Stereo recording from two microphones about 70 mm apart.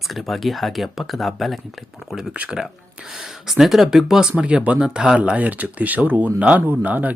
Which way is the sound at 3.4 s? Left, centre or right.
Centre.